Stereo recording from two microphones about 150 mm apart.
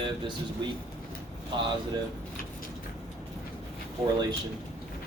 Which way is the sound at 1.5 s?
30° right (ahead or behind).